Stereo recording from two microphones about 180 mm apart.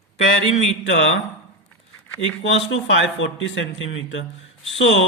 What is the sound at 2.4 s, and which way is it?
Speech, 90° left.